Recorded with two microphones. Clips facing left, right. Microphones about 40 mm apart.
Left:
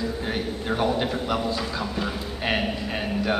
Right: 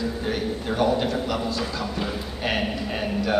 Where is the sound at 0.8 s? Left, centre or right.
Centre.